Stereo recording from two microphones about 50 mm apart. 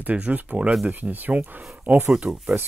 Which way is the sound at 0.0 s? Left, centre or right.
Right.